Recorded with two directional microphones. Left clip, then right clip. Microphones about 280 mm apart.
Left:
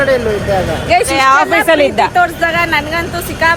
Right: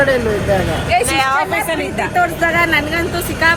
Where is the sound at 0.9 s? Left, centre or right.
Left.